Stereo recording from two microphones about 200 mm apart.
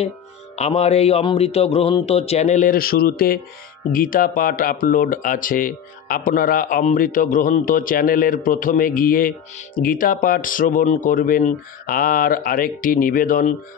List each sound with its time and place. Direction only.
0.6 s speech: 30° left (ahead or behind)